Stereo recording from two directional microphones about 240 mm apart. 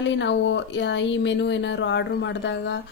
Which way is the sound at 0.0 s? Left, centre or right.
Left.